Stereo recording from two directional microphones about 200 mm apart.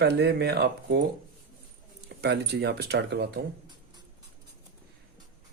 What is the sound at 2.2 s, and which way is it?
Speech, 55° right (ahead or behind).